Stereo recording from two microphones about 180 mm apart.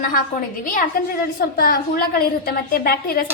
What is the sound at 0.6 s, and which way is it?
A woman's voice, 50° left (ahead or behind).